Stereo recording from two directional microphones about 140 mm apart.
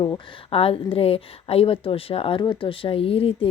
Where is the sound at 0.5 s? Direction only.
45° left (ahead or behind).